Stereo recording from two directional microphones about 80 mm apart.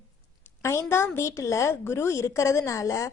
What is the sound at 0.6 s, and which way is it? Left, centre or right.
A woman's voice, left.